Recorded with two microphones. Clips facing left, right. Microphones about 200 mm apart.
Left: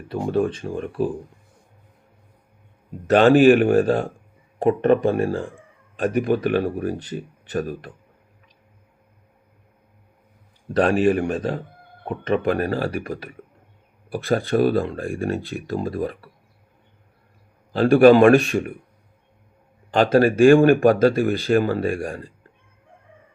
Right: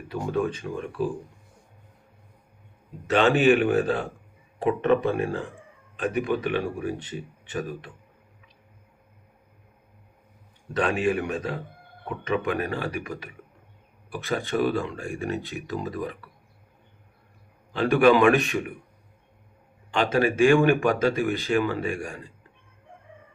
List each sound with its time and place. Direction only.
0.1 s speech: 35° left (ahead or behind)
3.2 s speech: 45° left (ahead or behind)
10.8 s speech: 35° left (ahead or behind)
17.7 s a man's voice: 35° left (ahead or behind)
19.9 s speech: 35° left (ahead or behind)
20.5 s speech: 50° left (ahead or behind)
20.8 s speech: 35° left (ahead or behind)